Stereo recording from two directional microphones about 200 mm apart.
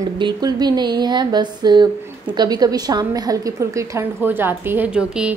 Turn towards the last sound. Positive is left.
turn(degrees=-5)  # may be behind; listen again after turning